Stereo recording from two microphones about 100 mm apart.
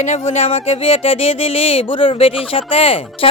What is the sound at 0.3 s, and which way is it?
Speech, 90° left.